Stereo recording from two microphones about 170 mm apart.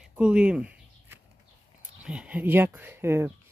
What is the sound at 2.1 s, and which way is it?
Speech, 5° right (ahead or behind).